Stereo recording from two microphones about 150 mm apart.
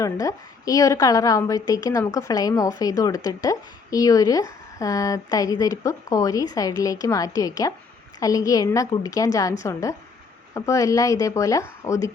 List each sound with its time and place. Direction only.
0.0 s a woman's voice: 20° left (ahead or behind)